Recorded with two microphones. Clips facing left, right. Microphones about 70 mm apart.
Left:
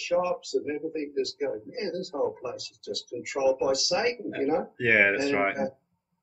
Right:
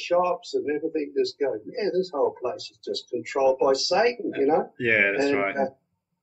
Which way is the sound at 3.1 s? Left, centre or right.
Right.